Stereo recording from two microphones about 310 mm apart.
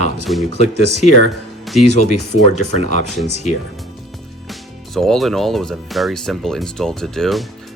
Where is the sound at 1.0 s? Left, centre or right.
Left.